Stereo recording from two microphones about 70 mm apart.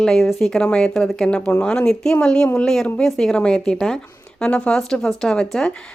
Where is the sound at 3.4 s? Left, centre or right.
Centre.